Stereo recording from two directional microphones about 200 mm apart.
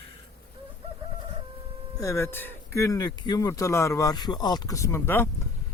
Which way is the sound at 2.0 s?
15° left (ahead or behind).